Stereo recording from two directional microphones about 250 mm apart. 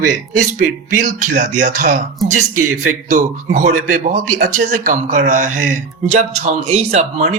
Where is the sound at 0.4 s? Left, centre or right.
Right.